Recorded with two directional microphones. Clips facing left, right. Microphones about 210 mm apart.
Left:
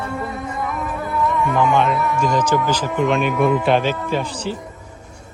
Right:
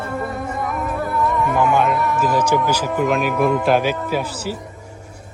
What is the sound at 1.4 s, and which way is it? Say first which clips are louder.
Speech: even; 5° right (ahead or behind).